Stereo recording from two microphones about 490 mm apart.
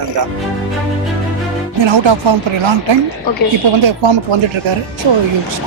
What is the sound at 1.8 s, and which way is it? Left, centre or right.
Speech, right.